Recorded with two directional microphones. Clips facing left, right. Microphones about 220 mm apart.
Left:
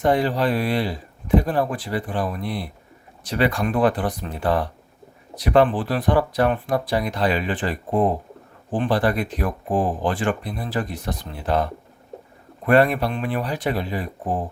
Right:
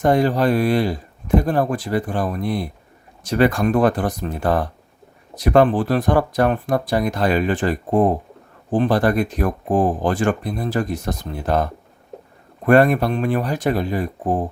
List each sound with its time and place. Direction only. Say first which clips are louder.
0.0 s speech: right 3 dB; 45° right (ahead or behind)